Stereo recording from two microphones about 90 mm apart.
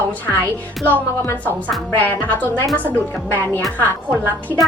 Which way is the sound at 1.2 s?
30° left (ahead or behind).